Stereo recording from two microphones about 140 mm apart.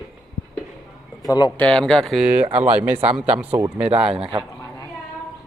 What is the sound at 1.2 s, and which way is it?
Speech, 30° left (ahead or behind).